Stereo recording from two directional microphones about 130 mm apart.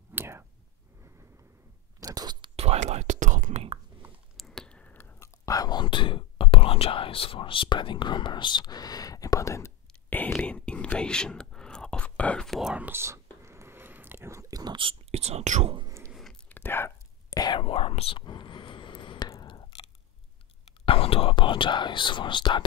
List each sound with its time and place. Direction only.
0.1 s whispering: 20° right (ahead or behind)
2.0 s a sound: 30° right (ahead or behind)
2.5 s whispering: 55° right (ahead or behind); by 3.6 s 75° right (ahead or behind)
4.4 s whispering: 5° left (ahead or behind); by 15.7 s 60° right (ahead or behind)
16.1 s whispering: centre (ahead or behind)
16.4 s whispering: 15° left (ahead or behind)
17.3 s whispering: 30° left (ahead or behind)
17.6 s whispering: 45° left (ahead or behind)
20.8 s speech: 45° left (ahead or behind)